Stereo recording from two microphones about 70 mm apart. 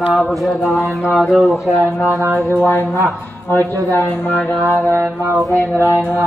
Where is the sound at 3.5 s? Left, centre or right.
Left.